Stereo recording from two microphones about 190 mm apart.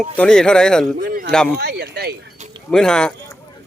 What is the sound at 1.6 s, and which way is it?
Speech, 60° right (ahead or behind).